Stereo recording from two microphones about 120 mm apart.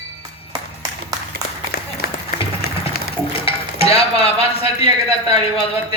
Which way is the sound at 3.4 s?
55° left (ahead or behind).